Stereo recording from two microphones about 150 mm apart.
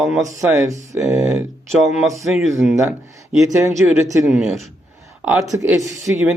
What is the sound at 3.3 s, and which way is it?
Speech, 20° right (ahead or behind).